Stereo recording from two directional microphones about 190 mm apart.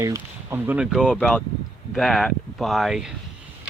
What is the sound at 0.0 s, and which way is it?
Speech, 15° right (ahead or behind).